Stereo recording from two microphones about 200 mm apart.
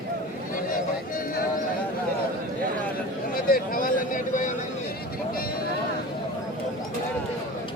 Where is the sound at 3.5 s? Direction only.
45° left (ahead or behind).